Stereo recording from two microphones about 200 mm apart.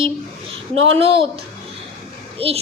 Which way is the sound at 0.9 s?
25° right (ahead or behind).